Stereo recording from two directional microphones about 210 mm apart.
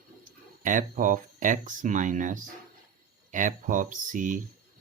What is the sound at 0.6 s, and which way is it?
Speech, 40° right (ahead or behind).